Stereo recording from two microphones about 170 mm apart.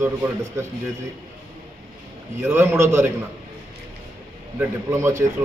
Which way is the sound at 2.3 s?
15° right (ahead or behind).